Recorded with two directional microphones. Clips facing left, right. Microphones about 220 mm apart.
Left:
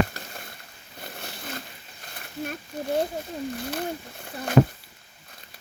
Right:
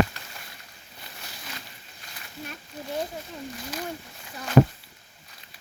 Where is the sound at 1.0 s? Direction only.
55° left (ahead or behind).